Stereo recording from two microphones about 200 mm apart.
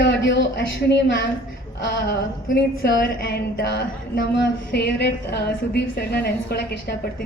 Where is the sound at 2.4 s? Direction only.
50° left (ahead or behind).